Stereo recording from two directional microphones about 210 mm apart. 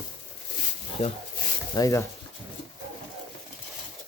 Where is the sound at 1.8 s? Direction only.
15° left (ahead or behind).